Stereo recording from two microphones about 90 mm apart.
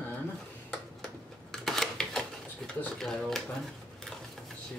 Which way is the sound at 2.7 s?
5° left (ahead or behind).